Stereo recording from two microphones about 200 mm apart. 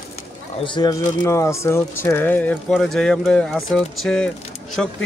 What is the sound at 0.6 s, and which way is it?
Speech, 20° left (ahead or behind).